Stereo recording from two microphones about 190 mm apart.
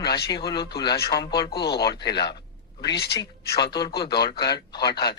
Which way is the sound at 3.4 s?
55° left (ahead or behind).